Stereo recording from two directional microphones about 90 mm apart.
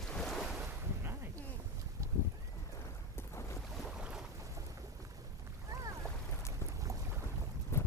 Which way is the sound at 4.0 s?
10° right (ahead or behind).